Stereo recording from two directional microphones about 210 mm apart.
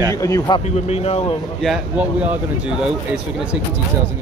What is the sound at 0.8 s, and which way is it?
Speech, 30° left (ahead or behind).